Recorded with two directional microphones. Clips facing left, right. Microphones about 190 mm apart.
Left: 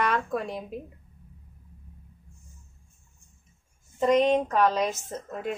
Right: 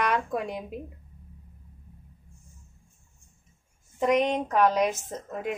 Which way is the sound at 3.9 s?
10° right (ahead or behind).